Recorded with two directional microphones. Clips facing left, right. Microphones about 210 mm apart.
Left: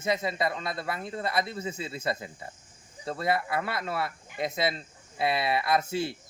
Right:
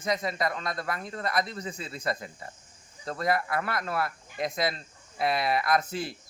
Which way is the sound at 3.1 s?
25° left (ahead or behind).